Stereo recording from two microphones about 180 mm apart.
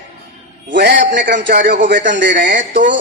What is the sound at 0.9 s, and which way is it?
Speech, 50° right (ahead or behind).